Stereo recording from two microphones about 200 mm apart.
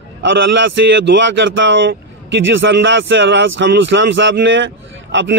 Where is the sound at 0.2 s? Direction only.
65° right (ahead or behind).